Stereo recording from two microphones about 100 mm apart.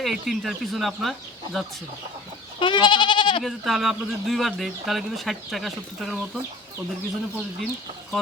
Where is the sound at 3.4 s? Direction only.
Centre (ahead or behind).